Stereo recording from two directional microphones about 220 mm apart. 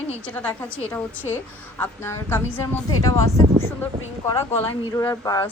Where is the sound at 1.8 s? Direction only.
10° left (ahead or behind).